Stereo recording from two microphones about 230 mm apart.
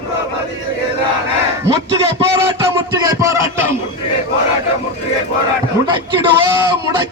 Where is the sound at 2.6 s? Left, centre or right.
Centre.